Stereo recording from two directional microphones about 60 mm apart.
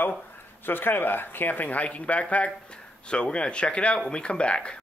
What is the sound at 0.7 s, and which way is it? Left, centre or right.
Speech, left.